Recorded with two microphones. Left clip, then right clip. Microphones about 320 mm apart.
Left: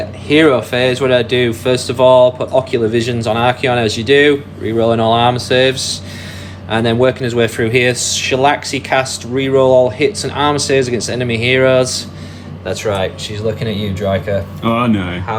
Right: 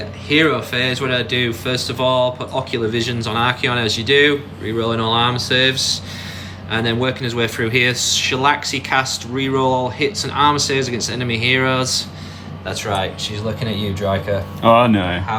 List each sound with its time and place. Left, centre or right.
0.3 s speech: centre
14.6 s speech: right